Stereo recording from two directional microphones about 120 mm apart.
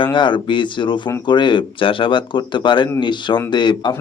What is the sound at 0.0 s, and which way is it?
Speech, 40° left (ahead or behind).